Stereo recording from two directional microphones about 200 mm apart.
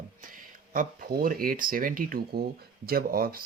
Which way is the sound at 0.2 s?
40° right (ahead or behind).